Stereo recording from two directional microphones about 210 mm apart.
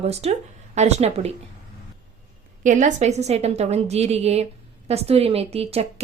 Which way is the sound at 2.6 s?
35° right (ahead or behind).